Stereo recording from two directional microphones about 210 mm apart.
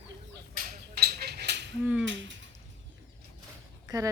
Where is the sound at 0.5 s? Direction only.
40° right (ahead or behind).